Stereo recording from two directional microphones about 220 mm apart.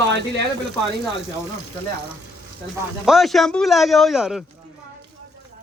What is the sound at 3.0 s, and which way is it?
Speech, centre (ahead or behind).